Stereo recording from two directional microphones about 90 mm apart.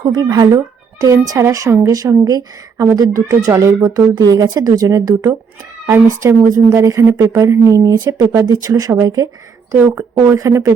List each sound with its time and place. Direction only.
0.0 s speech: 50° right (ahead or behind)
8.0 s speech: 30° right (ahead or behind)
8.4 s speech: 40° right (ahead or behind)
9.7 s speech: 15° right (ahead or behind)
10.0 s speech: 35° right (ahead or behind)